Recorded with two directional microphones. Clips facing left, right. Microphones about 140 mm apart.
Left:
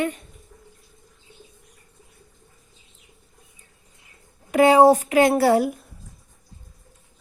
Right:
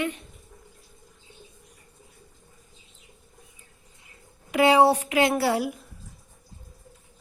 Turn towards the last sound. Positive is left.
turn(degrees=45)  # may be behind; listen again after turning